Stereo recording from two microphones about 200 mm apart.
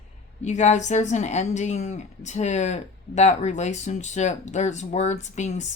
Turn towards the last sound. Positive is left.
turn(degrees=35)  # may be behind; listen again after turning